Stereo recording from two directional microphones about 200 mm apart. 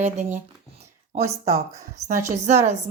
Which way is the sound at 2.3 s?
35° right (ahead or behind).